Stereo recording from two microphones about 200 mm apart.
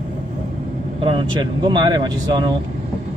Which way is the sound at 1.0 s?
25° right (ahead or behind).